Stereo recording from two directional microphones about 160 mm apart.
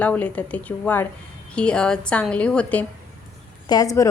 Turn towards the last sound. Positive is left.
turn(degrees=20)  # may be behind; listen again after turning